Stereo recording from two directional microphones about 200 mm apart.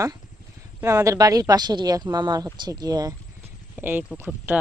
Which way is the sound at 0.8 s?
15° right (ahead or behind).